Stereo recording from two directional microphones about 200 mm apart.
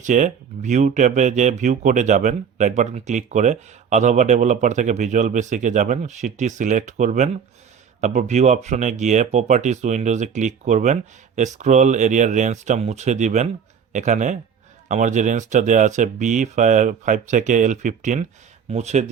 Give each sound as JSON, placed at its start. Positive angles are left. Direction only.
{"t": 0.0, "sound": "speech", "side_deg": -40}